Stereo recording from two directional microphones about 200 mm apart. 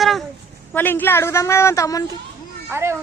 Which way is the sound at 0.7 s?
10° left (ahead or behind).